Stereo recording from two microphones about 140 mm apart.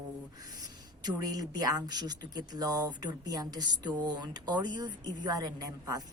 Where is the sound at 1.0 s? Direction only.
25° right (ahead or behind).